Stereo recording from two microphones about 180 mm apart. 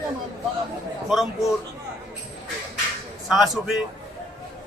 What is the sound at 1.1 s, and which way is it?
Speech, centre (ahead or behind).